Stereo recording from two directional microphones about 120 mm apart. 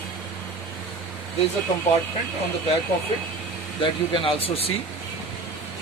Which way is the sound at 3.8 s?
45° left (ahead or behind).